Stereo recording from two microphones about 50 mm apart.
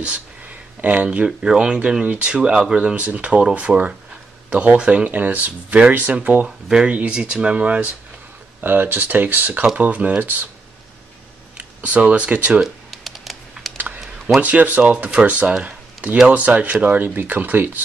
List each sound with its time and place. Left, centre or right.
0.7 s speech: right
3.0 s speech: right
5.1 s speech: right
6.4 s speech: centre
8.5 s speech: right
11.5 s speech: right
12.5 s typing: centre
13.7 s typing: right
14.4 s speech: right
14.8 s speech: right
15.6 s a sound: right
16.4 s speech: right